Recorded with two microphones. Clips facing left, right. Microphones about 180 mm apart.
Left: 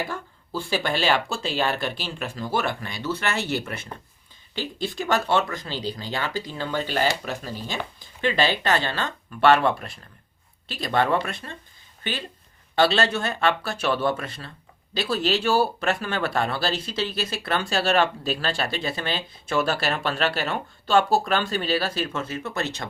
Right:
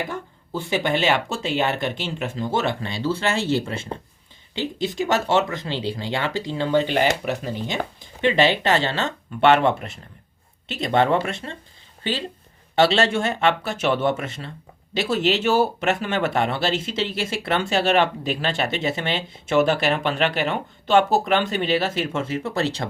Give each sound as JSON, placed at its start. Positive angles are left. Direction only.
{"t": 0.1, "sound": "speech", "side_deg": -20}
{"t": 12.7, "sound": "speech", "side_deg": -25}